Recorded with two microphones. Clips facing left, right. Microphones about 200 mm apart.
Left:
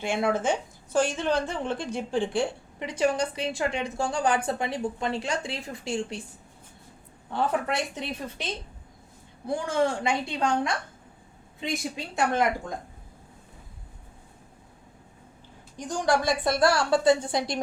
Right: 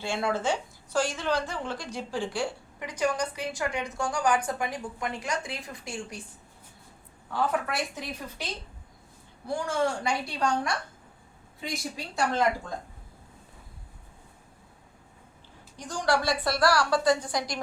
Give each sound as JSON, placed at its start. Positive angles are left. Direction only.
{"t": 0.0, "sound": "a woman's voice", "side_deg": 20}
{"t": 7.3, "sound": "a woman's voice", "side_deg": 25}
{"t": 11.8, "sound": "a woman's voice", "side_deg": 20}
{"t": 15.8, "sound": "a woman's voice", "side_deg": 20}